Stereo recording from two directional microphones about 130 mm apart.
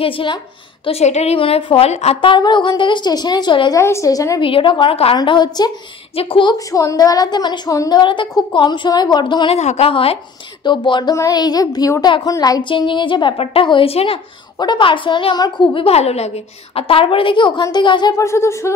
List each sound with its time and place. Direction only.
0.0 s a woman's voice: 40° left (ahead or behind)
0.8 s a woman's voice: 55° left (ahead or behind)
2.2 s a woman's voice: 35° left (ahead or behind)
3.8 s a woman's voice: 25° left (ahead or behind)
4.4 s a woman's voice: 40° left (ahead or behind)
6.7 s a woman's voice: 25° left (ahead or behind)
8.0 s a woman's voice: 40° left (ahead or behind)
9.5 s a woman's voice: 55° left (ahead or behind)
10.6 s a woman's voice: 35° left (ahead or behind)
18.1 s a woman's voice: 20° left (ahead or behind)